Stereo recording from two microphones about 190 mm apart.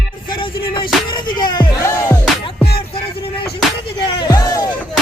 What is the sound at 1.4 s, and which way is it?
Speech, 25° left (ahead or behind).